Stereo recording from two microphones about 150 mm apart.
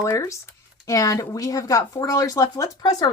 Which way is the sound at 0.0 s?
20° left (ahead or behind).